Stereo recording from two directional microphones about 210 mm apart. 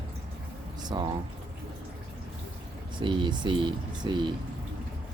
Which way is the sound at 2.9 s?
20° right (ahead or behind).